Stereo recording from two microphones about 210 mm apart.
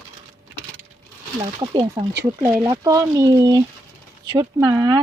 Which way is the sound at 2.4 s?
10° right (ahead or behind).